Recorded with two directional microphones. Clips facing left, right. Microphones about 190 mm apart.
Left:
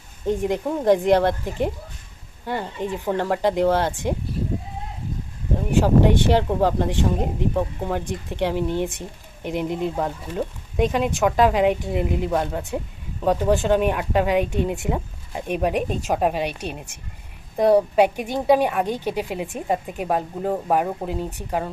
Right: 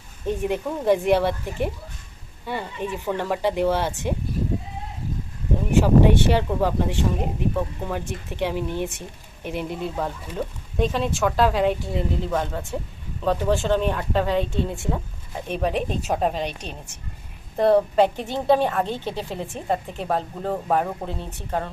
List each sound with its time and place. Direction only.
0.3 s speech: 15° left (ahead or behind)
6.1 s speech: 15° left (ahead or behind)